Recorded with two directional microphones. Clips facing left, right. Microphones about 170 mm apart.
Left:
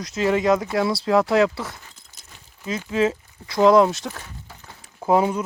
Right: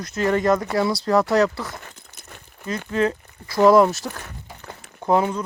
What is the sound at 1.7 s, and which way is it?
Keys jangling, 65° right (ahead or behind).